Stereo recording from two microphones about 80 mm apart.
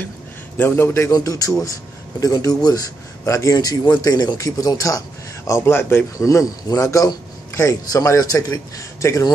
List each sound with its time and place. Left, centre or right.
0.6 s a man's voice: left
1.1 s a man's voice: left
5.6 s a man's voice: left
6.1 s a man's voice: left